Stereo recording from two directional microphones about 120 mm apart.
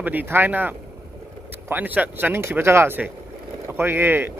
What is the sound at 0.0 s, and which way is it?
Speech, 15° right (ahead or behind).